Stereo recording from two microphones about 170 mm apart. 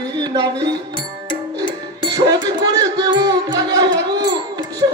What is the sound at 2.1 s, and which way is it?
Speech, 25° right (ahead or behind).